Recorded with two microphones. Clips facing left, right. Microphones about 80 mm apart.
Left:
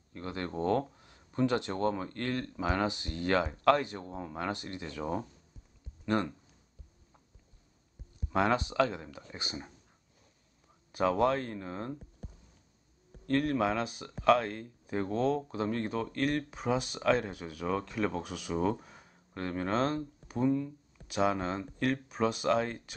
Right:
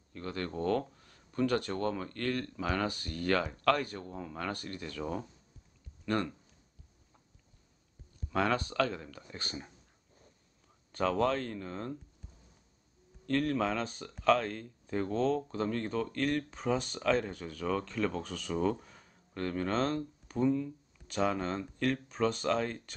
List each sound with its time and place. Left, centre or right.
0.1 s speech: left
8.3 s speech: left
10.9 s speech: centre
13.2 s speech: centre